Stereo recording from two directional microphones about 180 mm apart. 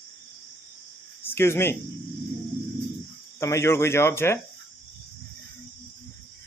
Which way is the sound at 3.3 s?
15° left (ahead or behind).